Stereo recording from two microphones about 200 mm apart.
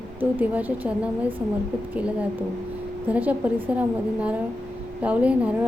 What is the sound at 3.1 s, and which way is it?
A woman's voice, 5° right (ahead or behind).